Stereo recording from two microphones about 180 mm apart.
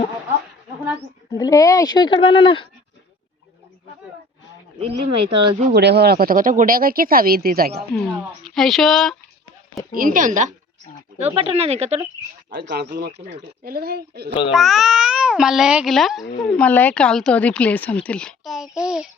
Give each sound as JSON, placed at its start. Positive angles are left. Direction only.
{"t": 1.4, "sound": "speech", "side_deg": 20}
{"t": 4.8, "sound": "speech", "side_deg": -30}
{"t": 5.7, "sound": "speech", "side_deg": -65}
{"t": 8.4, "sound": "a child's voice", "side_deg": 0}
{"t": 9.9, "sound": "speech", "side_deg": -50}
{"t": 11.3, "sound": "speech", "side_deg": -35}
{"t": 12.5, "sound": "speech", "side_deg": -70}
{"t": 14.5, "sound": "a child's voice", "side_deg": 0}